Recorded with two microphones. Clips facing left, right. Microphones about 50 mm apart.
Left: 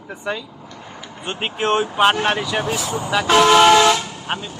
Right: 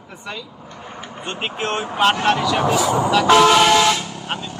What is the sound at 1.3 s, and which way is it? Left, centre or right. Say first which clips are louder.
Speech: left 4 dB; left.